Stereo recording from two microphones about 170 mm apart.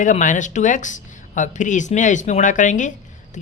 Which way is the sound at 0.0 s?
50° left (ahead or behind).